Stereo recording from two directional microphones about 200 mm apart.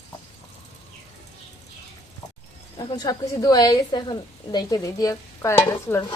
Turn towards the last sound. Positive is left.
turn(degrees=15)  # may be behind; listen again after turning